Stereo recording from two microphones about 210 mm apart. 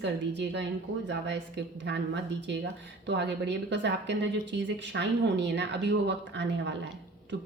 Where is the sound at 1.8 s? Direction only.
55° right (ahead or behind).